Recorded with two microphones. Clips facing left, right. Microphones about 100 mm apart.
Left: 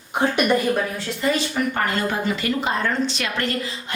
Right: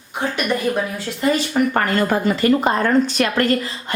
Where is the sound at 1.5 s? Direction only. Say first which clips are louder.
Right 5 dB; 55° right (ahead or behind).